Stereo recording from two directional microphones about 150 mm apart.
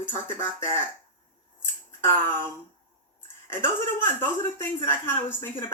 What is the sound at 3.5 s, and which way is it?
Speech, 15° left (ahead or behind).